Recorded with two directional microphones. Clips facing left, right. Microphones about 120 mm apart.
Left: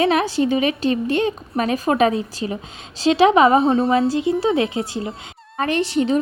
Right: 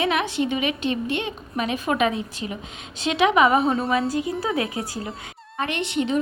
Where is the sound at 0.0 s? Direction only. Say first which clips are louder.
Left 5 dB; 35° left (ahead or behind).